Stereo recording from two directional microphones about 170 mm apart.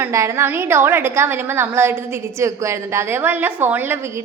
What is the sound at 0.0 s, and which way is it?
A woman's voice, 15° right (ahead or behind).